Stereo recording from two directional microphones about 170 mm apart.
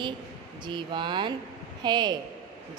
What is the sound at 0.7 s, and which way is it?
A woman's voice, 25° right (ahead or behind).